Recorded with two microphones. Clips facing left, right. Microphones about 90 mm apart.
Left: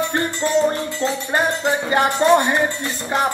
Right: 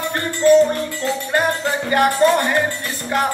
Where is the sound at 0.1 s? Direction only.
20° left (ahead or behind).